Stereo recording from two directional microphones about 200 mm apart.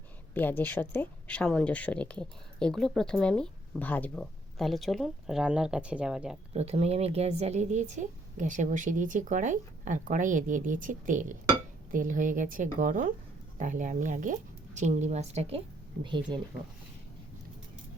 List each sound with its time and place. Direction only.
0.3 s speech: 10° left (ahead or behind)
6.5 s speech: 30° right (ahead or behind)